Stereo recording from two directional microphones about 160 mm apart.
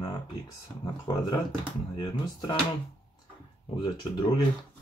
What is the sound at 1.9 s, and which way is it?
Speech, 25° left (ahead or behind).